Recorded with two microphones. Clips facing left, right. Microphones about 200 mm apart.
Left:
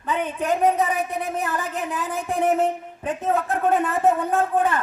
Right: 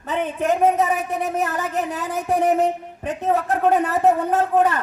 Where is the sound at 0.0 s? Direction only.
45° right (ahead or behind).